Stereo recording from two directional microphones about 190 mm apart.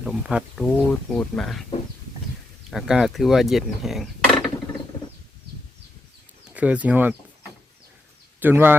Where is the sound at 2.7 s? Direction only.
Centre (ahead or behind).